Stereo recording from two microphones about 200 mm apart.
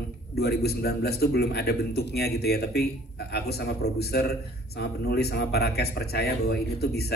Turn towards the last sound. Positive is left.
turn(degrees=55)  # may be behind; listen again after turning